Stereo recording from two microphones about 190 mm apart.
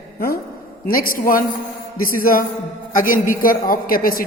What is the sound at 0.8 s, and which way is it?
A woman's voice, 50° left (ahead or behind).